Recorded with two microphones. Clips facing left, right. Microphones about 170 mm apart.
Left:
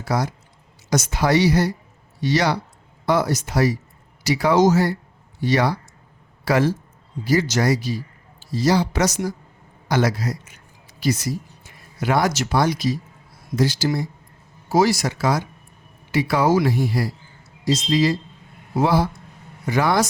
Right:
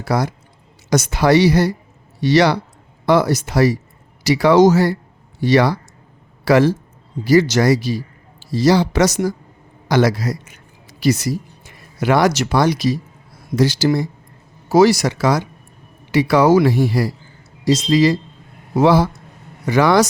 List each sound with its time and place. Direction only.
0.0 s a woman's voice: 70° right (ahead or behind)
9.9 s a man's voice: 90° right